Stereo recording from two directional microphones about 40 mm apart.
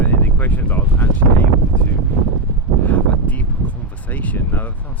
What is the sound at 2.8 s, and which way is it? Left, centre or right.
Speech, left.